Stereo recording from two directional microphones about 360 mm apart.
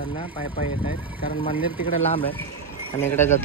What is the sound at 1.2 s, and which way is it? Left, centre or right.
Speech, centre.